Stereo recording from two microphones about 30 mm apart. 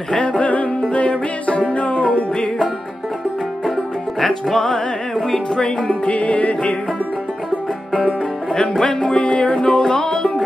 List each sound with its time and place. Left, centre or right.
0.1 s music: left
0.4 s music: left
4.2 s music: centre
6.0 s music: left
8.8 s music: left
9.7 s music: left